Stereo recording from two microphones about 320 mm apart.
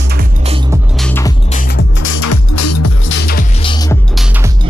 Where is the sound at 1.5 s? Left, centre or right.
Left.